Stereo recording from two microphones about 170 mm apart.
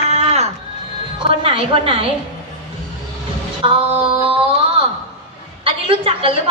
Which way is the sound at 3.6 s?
30° right (ahead or behind).